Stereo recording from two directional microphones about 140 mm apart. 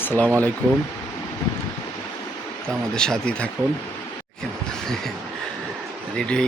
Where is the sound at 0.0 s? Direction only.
10° left (ahead or behind).